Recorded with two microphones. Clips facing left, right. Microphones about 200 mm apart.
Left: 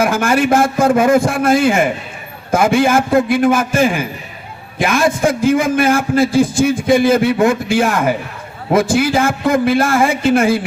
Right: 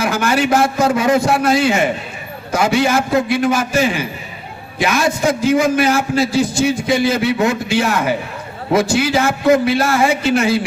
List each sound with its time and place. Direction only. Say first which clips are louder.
0.0 s a man's voice: left 3 dB; 50° left (ahead or behind)